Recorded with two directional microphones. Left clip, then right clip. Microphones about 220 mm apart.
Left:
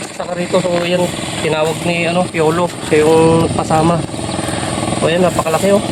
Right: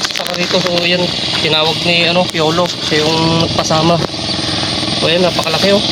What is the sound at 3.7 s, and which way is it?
Speech, 35° right (ahead or behind).